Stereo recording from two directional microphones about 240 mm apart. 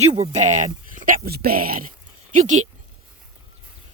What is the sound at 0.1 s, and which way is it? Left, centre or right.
Speech, right.